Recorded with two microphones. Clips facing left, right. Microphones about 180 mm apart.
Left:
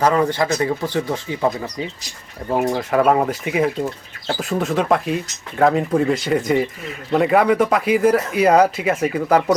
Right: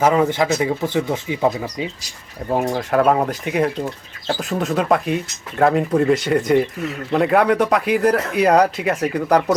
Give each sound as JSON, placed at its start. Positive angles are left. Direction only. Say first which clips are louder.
{"t": 0.0, "sound": "speech", "louder": "right 1 dB", "side_deg": -10}
{"t": 0.8, "sound": "speech", "louder": "right 1 dB", "side_deg": -20}
{"t": 2.6, "sound": "speech", "louder": "left 1 dB", "side_deg": 0}